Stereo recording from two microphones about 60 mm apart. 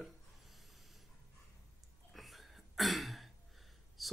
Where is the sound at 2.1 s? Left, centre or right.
Centre.